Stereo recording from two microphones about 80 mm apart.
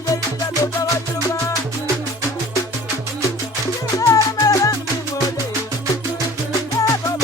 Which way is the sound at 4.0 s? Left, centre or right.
Left.